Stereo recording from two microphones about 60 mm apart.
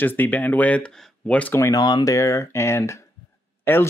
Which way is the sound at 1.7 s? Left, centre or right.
Left.